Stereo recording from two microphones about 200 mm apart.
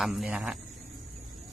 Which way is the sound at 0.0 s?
Centre (ahead or behind).